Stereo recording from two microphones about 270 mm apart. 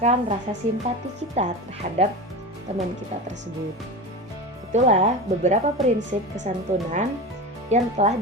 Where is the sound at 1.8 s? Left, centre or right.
Right.